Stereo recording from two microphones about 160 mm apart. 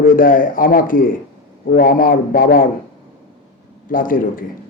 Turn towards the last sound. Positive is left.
turn(degrees=60)  # may be behind; listen again after turning